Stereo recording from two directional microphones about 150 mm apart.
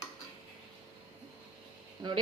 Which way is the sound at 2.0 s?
30° right (ahead or behind).